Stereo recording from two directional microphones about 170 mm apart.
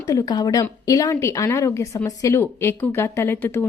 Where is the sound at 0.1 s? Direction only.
20° left (ahead or behind).